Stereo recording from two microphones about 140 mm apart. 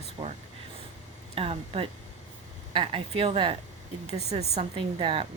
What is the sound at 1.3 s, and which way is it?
A woman's voice, 45° right (ahead or behind).